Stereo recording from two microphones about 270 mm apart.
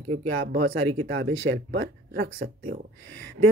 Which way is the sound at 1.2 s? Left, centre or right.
Right.